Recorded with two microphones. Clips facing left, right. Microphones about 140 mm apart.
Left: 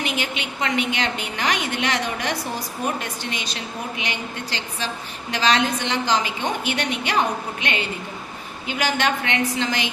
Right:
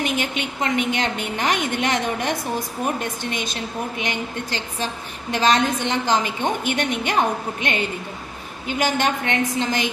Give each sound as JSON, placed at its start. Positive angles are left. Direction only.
{"t": 0.0, "sound": "a woman's voice", "side_deg": -45}